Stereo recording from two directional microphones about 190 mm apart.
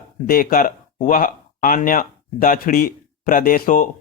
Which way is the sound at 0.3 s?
50° left (ahead or behind).